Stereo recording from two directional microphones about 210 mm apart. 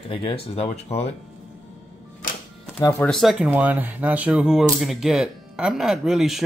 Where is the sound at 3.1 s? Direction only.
5° right (ahead or behind).